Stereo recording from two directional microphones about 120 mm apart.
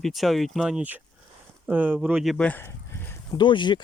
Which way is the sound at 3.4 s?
40° left (ahead or behind).